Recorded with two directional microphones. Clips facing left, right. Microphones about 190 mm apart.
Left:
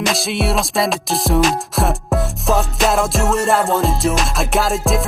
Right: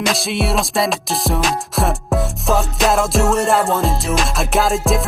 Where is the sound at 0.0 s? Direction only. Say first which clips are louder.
Even; centre (ahead or behind).